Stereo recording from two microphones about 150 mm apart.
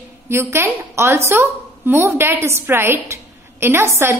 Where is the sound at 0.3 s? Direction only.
15° right (ahead or behind).